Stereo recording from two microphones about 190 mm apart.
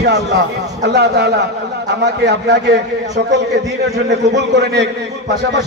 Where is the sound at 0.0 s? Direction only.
60° right (ahead or behind).